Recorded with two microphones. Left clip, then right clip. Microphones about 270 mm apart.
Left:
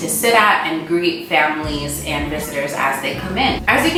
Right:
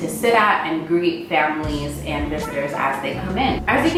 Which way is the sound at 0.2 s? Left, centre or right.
Centre.